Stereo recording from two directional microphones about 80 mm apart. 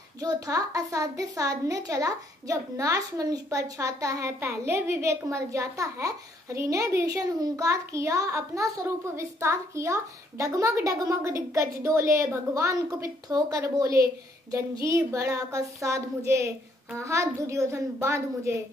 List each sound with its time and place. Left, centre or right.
0.2 s a child's voice: right